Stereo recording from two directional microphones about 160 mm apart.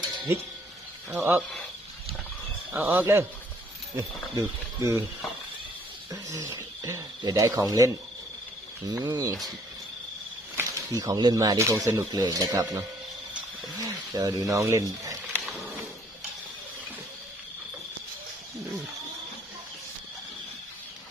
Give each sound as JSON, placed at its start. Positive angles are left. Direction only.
{"t": 1.2, "sound": "cricket", "side_deg": -15}
{"t": 2.7, "sound": "cricket", "side_deg": -10}
{"t": 6.1, "sound": "speech", "side_deg": -20}
{"t": 10.6, "sound": "speech", "side_deg": -20}
{"t": 13.8, "sound": "speech", "side_deg": -25}
{"t": 15.2, "sound": "insect", "side_deg": -10}